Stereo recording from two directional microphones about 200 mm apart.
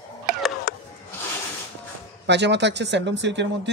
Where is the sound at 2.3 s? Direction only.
60° right (ahead or behind).